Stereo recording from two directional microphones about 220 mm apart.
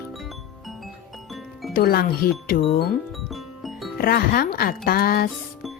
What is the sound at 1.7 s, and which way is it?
Speech, 45° left (ahead or behind).